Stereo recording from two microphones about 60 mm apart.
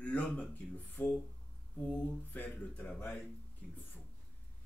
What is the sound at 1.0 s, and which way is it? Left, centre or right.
Speech, left.